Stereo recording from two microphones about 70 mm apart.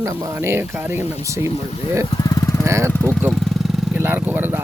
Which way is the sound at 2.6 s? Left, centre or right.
Right.